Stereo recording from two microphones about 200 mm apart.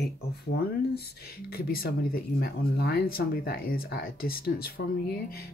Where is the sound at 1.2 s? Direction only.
50° left (ahead or behind).